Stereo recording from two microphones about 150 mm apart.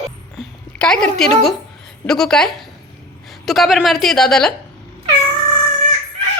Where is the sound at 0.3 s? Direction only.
5° left (ahead or behind).